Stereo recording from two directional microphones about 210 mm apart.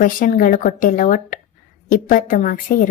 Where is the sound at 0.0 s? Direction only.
40° left (ahead or behind).